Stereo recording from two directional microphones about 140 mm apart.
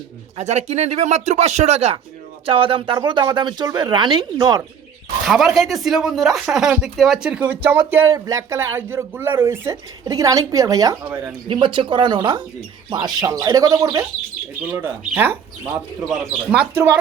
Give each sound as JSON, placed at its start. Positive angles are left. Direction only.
{"t": 0.3, "sound": "speech", "side_deg": -50}
{"t": 2.5, "sound": "speech", "side_deg": -40}
{"t": 5.2, "sound": "speech", "side_deg": 0}
{"t": 11.4, "sound": "speech", "side_deg": -35}
{"t": 14.6, "sound": "speech", "side_deg": -15}